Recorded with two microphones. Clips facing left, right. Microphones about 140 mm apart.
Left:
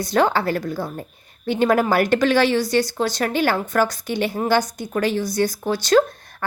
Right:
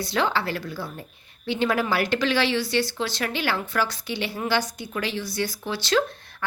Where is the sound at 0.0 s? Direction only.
45° left (ahead or behind).